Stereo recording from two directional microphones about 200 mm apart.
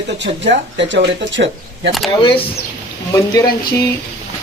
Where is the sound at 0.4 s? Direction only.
60° right (ahead or behind).